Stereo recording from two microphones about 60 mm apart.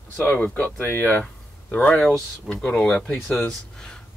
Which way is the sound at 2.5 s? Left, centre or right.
Centre.